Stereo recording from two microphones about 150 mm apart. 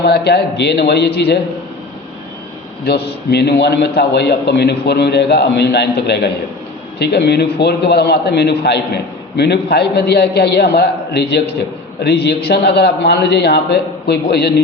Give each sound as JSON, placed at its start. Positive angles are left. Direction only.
{"t": 0.0, "sound": "a man's voice", "side_deg": 90}
{"t": 2.8, "sound": "a man's voice", "side_deg": 90}